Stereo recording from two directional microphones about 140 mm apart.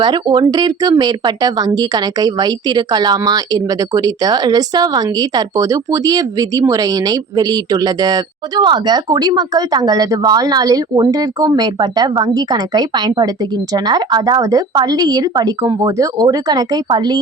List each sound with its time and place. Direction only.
0.0 s speech: 30° right (ahead or behind)